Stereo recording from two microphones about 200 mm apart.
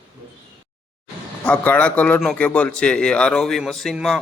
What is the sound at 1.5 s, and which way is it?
A man's voice, 5° left (ahead or behind).